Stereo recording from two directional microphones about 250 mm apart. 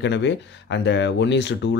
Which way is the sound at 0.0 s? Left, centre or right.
Left.